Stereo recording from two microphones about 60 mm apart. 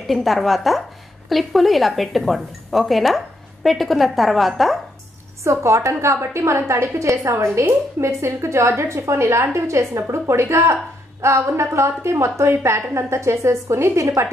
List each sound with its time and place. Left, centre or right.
0.0 s speech: centre
5.4 s a woman's voice: right
13.9 s a woman's voice: right